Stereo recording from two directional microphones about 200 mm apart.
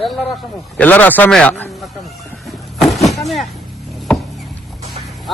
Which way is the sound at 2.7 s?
Centre (ahead or behind).